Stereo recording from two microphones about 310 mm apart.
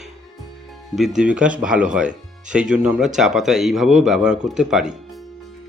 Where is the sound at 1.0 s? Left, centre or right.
Centre.